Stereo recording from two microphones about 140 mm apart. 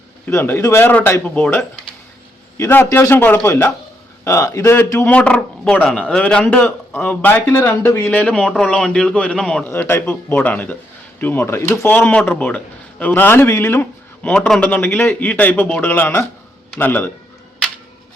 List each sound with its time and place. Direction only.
0.3 s a man's voice: 15° left (ahead or behind)
9.6 s a man's voice: 15° left (ahead or behind)